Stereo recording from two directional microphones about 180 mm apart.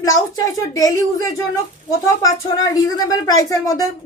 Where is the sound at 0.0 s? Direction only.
20° left (ahead or behind).